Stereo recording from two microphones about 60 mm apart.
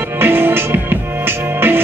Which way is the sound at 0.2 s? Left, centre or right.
Right.